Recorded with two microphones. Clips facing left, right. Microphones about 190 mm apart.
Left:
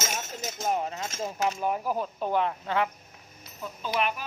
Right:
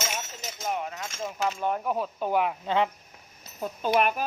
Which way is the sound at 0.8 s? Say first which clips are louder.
Left 2 dB; 35° left (ahead or behind).